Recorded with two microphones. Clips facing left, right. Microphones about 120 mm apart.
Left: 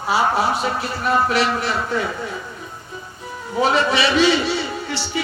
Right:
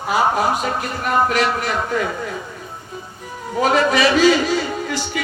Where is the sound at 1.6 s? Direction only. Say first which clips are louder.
Right 1 dB; 45° right (ahead or behind).